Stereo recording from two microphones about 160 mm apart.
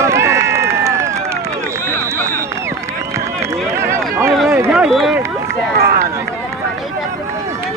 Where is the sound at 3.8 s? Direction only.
15° right (ahead or behind).